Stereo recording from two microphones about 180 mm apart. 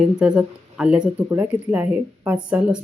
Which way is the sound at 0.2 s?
5° right (ahead or behind).